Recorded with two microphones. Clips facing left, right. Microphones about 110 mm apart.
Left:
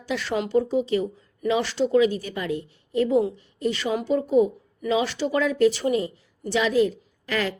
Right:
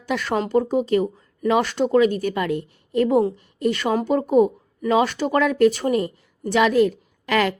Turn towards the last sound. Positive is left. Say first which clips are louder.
# right 6 dB
turn(degrees=-70)  # may be behind; listen again after turning